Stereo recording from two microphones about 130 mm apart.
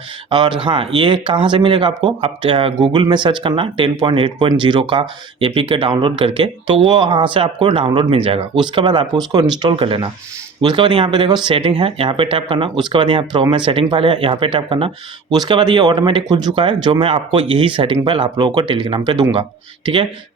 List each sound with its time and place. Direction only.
0.3 s speech: 35° right (ahead or behind)